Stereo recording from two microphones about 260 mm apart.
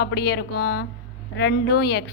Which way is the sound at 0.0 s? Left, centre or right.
Left.